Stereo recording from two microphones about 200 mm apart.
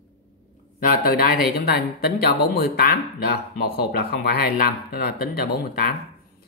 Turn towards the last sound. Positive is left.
turn(degrees=50)  # may be behind; listen again after turning